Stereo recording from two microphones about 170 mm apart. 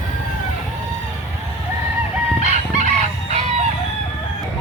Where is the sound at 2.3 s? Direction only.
45° right (ahead or behind).